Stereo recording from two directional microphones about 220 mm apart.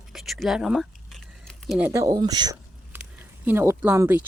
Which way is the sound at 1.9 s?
15° right (ahead or behind).